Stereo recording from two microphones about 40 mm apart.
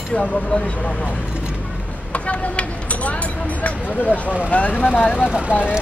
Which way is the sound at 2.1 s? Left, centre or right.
Left.